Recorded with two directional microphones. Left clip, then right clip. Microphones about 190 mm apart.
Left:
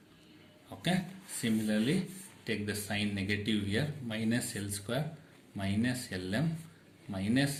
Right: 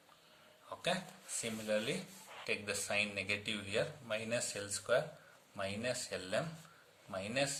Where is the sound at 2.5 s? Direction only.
35° right (ahead or behind).